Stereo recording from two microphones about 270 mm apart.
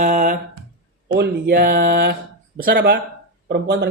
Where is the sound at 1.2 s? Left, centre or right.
Right.